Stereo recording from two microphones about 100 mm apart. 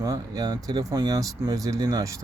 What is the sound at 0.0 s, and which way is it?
Speech, 35° right (ahead or behind).